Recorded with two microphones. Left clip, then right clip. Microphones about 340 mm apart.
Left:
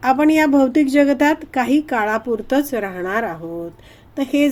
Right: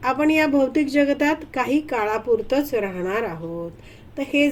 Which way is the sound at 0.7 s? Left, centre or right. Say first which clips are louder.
Left 5 dB; left.